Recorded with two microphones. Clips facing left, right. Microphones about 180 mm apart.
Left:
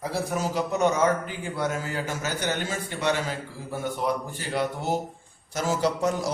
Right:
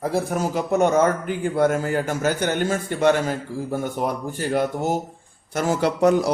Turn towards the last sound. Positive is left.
turn(degrees=-65)  # may be behind; listen again after turning